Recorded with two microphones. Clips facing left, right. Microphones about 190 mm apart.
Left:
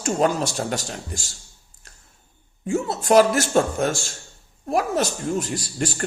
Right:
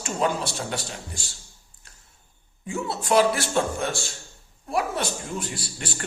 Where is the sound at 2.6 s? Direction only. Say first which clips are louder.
Left 6 dB; 45° left (ahead or behind).